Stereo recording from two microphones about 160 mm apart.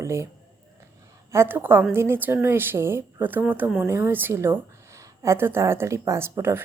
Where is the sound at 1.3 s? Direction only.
15° right (ahead or behind).